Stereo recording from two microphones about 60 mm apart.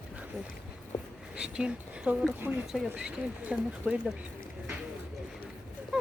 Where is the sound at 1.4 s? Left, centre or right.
Centre.